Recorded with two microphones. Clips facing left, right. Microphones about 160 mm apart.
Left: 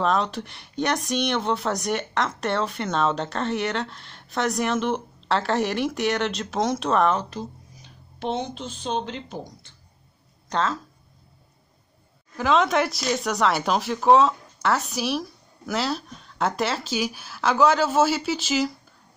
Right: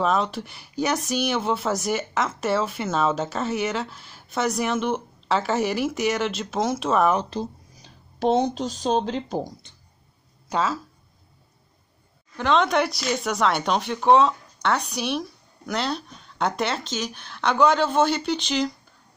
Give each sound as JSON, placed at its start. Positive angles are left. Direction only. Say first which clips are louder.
{"t": 0.0, "sound": "speech", "louder": "even", "side_deg": 0}
{"t": 7.2, "sound": "speech", "louder": "right 4 dB", "side_deg": -35}
{"t": 10.5, "sound": "speech", "louder": "right 1 dB", "side_deg": -5}
{"t": 12.4, "sound": "speech", "louder": "even", "side_deg": 0}